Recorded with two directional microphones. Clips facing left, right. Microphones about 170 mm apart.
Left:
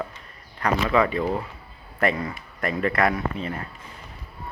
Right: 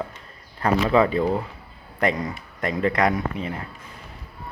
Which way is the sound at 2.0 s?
20° right (ahead or behind).